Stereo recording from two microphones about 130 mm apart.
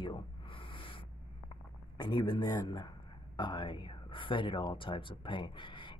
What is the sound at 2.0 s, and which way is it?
Speech, 35° left (ahead or behind).